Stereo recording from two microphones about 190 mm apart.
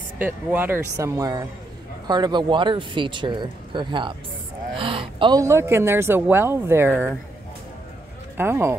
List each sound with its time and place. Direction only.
0.2 s speech: 10° right (ahead or behind)
8.4 s speech: 15° right (ahead or behind)